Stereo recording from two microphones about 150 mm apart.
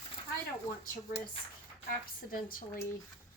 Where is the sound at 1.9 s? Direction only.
70° left (ahead or behind).